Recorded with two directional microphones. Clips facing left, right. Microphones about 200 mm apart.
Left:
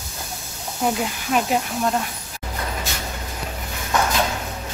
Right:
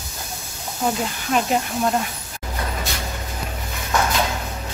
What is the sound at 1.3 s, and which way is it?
Speech, 5° left (ahead or behind).